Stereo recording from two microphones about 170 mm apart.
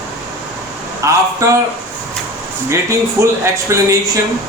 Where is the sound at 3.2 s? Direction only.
15° right (ahead or behind).